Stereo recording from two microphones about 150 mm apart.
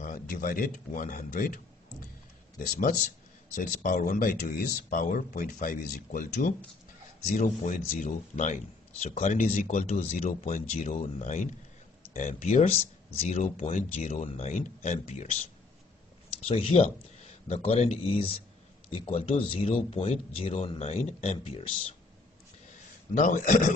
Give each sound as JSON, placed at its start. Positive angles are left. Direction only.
{"t": 0.0, "sound": "speech", "side_deg": 65}
{"t": 3.5, "sound": "speech", "side_deg": 65}
{"t": 16.4, "sound": "speech", "side_deg": 40}
{"t": 23.1, "sound": "speech", "side_deg": 60}